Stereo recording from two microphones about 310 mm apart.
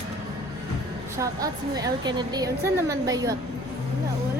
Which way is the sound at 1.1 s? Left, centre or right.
Centre.